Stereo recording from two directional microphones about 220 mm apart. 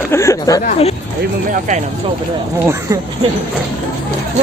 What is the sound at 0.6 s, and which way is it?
Speech, 30° left (ahead or behind).